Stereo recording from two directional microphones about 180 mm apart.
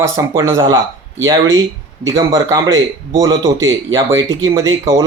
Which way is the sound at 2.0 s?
20° right (ahead or behind).